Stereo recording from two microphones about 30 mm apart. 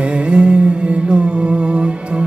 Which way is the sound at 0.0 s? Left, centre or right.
Right.